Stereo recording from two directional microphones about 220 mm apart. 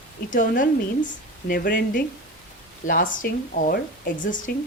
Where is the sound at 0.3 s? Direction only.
35° left (ahead or behind).